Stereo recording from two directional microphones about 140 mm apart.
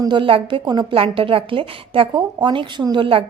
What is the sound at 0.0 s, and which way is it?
A woman's voice, 35° right (ahead or behind).